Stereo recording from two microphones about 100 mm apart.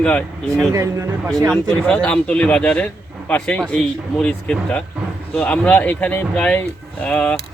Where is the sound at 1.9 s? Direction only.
10° left (ahead or behind).